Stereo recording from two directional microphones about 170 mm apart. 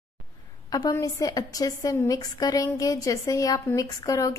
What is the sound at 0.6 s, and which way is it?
A woman's voice, 20° left (ahead or behind).